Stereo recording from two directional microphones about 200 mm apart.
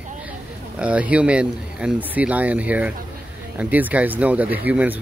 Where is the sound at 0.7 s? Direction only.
5° right (ahead or behind).